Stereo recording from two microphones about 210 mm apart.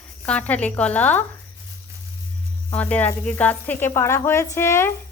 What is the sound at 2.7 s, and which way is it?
Speech, 5° left (ahead or behind).